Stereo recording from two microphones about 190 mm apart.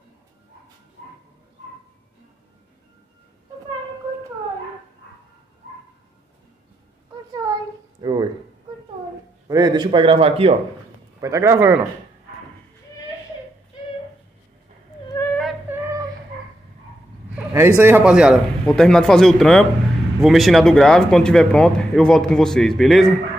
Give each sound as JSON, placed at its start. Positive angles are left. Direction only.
{"t": 8.0, "sound": "a sound", "side_deg": -20}
{"t": 9.5, "sound": "a man's voice", "side_deg": -20}
{"t": 11.1, "sound": "speech", "side_deg": -15}
{"t": 15.0, "sound": "whimper", "side_deg": 15}
{"t": 15.7, "sound": "female singing", "side_deg": -15}
{"t": 17.3, "sound": "speech", "side_deg": -10}